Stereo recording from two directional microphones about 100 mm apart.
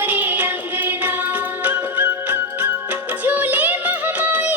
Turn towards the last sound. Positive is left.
turn(degrees=-15)  # may be behind; listen again after turning